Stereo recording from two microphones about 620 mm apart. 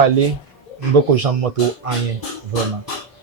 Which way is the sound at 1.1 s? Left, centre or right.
Right.